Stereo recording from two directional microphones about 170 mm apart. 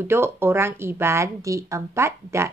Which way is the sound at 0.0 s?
15° right (ahead or behind).